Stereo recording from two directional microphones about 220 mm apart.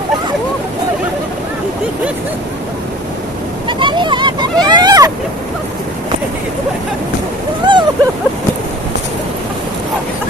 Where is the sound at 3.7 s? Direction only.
20° right (ahead or behind).